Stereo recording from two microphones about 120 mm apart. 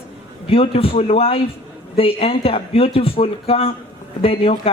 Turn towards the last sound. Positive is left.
turn(degrees=50)  # may be behind; listen again after turning